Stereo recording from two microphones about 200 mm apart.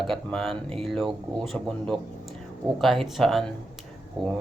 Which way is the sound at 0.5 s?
30° right (ahead or behind).